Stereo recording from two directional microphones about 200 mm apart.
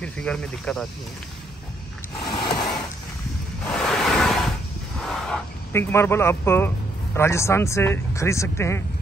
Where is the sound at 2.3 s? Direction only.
25° left (ahead or behind).